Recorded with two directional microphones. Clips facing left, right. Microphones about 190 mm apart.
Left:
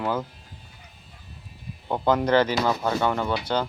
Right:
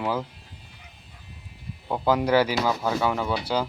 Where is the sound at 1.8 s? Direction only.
5° right (ahead or behind).